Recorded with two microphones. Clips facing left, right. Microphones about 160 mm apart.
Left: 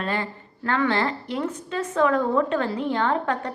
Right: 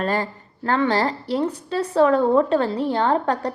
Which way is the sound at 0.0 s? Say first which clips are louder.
Right 4 dB; 40° right (ahead or behind).